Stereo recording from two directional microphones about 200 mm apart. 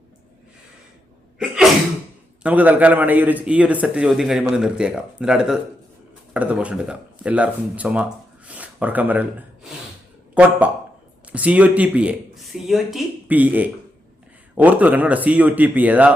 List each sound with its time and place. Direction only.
1.4 s sneeze: 5° right (ahead or behind)
2.4 s a man's voice: 10° right (ahead or behind)
8.4 s a sound: 5° right (ahead or behind)
10.3 s speech: 5° right (ahead or behind)